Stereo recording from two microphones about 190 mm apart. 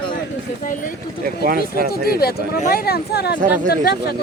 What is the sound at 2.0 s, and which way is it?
Speech, 55° left (ahead or behind).